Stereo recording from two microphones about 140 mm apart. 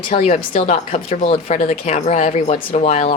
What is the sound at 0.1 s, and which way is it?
Speech, 65° left (ahead or behind).